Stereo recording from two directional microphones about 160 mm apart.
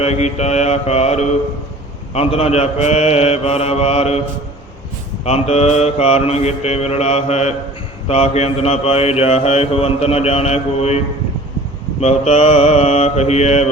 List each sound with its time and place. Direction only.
0.0 s mantra: 45° left (ahead or behind)
5.2 s mantra: 40° left (ahead or behind)